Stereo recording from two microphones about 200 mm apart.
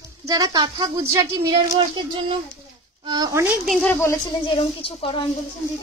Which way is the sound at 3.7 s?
10° left (ahead or behind).